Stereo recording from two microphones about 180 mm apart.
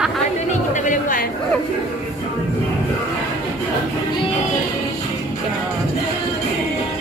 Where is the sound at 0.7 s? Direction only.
45° left (ahead or behind).